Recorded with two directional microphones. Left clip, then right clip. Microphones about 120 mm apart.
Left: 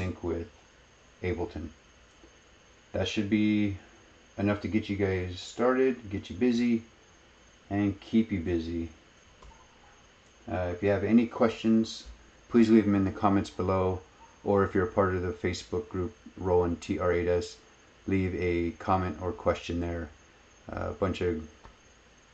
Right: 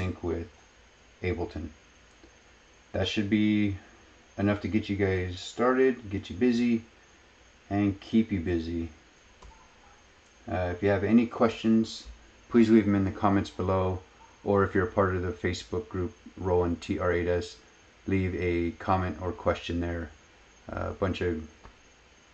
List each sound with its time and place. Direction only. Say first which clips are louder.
0.0 s a sound: right 1 dB; 5° right (ahead or behind)
1.2 s speech: right 1 dB; 5° left (ahead or behind)
3.0 s speech: right 1 dB; 5° left (ahead or behind)
10.4 s speech: right 1 dB; 5° right (ahead or behind)
12.4 s speech: right 1 dB; 20° left (ahead or behind)